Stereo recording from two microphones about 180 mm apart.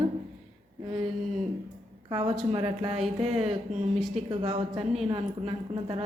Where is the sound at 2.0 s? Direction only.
30° right (ahead or behind).